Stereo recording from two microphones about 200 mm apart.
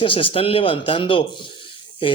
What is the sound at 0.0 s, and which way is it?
Speech, 25° left (ahead or behind).